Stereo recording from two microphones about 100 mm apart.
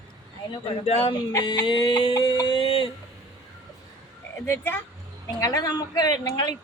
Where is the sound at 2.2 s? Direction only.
50° left (ahead or behind).